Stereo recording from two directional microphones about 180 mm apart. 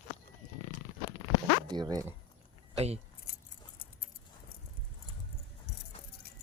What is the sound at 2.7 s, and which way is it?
Speech, 35° right (ahead or behind).